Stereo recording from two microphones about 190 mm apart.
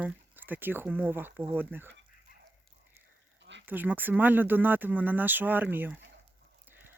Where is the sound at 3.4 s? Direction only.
70° right (ahead or behind).